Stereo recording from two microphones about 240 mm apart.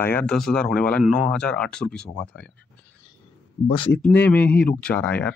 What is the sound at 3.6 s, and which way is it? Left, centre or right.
Speech, left.